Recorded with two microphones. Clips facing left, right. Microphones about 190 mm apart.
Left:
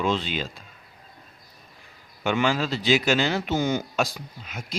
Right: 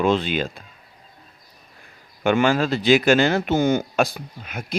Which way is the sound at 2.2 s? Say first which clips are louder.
Right 5 dB; 50° right (ahead or behind).